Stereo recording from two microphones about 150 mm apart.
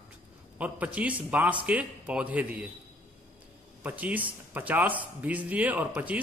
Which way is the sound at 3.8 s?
10° right (ahead or behind).